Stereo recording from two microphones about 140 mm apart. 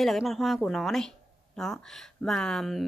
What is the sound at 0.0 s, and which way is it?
Speech, centre (ahead or behind).